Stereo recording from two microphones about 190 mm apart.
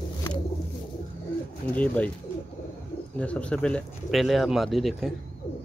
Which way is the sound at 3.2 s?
5° left (ahead or behind).